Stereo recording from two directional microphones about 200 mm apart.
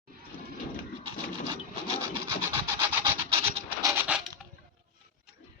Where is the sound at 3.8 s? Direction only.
15° right (ahead or behind).